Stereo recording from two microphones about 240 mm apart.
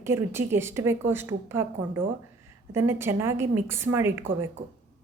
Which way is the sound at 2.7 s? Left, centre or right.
Centre.